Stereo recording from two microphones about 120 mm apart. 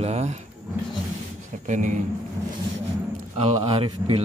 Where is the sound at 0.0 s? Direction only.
65° right (ahead or behind).